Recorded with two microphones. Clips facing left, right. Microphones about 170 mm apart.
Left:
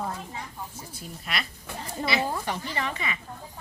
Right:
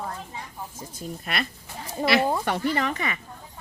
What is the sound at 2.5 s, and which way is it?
Speech, 50° right (ahead or behind).